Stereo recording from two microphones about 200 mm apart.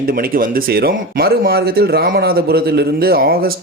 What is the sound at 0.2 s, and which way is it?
Speech, 45° right (ahead or behind).